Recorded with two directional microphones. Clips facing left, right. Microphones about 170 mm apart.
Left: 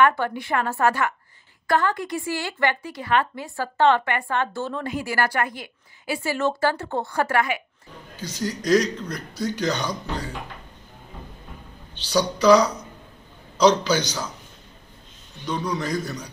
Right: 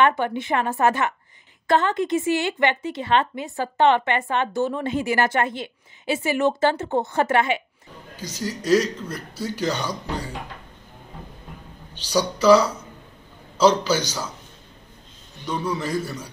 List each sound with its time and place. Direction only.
0.0 s a woman's voice: 20° right (ahead or behind)
8.2 s speech: 10° right (ahead or behind)
12.0 s speech: 10° right (ahead or behind)
15.4 s speech: 10° right (ahead or behind)